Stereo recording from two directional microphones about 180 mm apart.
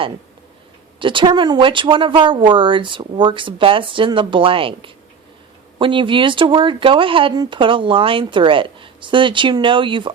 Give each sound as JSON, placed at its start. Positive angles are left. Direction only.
{"t": 0.9, "sound": "speech", "side_deg": -25}